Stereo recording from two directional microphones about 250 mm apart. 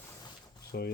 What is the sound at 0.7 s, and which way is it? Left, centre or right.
Rub, left.